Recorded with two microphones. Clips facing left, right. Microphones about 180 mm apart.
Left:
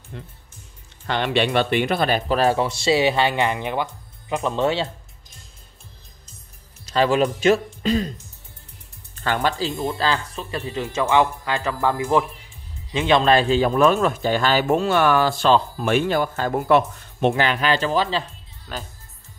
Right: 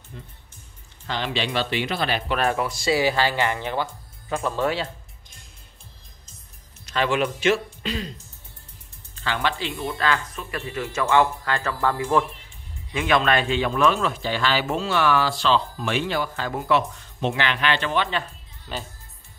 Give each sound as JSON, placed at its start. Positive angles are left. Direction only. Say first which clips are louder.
{"t": 0.1, "sound": "speech", "louder": "left 5 dB", "side_deg": 75}
{"t": 1.0, "sound": "speech", "louder": "left 6 dB", "side_deg": 60}
{"t": 6.9, "sound": "a man's voice", "louder": "left 4 dB", "side_deg": 35}
{"t": 9.1, "sound": "speech", "louder": "left 4 dB", "side_deg": 50}
{"t": 9.8, "sound": "speech", "louder": "right 1 dB", "side_deg": 30}
{"t": 12.9, "sound": "a man's voice", "louder": "left 4 dB", "side_deg": 25}
{"t": 18.7, "sound": "speech", "louder": "even", "side_deg": 0}